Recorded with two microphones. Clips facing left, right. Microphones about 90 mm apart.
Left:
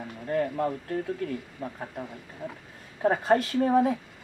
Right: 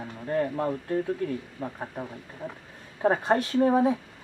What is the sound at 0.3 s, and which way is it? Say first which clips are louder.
Speech: even; 25° right (ahead or behind).